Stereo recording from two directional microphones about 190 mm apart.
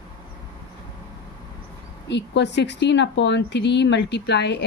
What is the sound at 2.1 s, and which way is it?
Speech, 65° left (ahead or behind).